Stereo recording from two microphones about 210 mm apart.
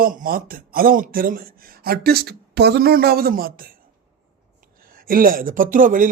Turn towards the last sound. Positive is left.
turn(degrees=-40)  # may be behind; listen again after turning